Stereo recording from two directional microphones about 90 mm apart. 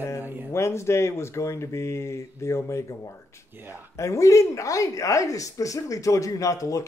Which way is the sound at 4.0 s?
35° left (ahead or behind).